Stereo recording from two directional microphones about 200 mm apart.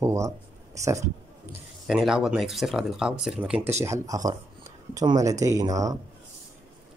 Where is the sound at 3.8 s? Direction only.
15° right (ahead or behind).